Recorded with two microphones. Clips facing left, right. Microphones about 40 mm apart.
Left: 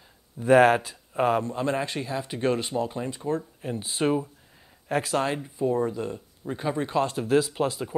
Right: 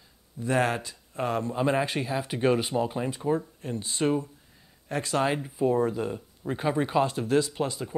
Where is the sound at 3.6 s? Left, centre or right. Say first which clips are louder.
Left 4 dB; centre.